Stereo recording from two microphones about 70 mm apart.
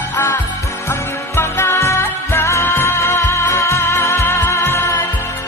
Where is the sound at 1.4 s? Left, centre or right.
Left.